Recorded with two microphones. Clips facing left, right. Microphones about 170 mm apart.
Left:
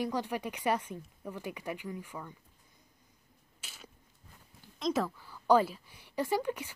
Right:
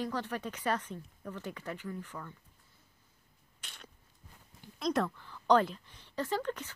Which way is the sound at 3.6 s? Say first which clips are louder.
Even; 5° left (ahead or behind).